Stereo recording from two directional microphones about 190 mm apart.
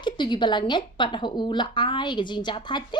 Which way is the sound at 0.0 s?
25° left (ahead or behind).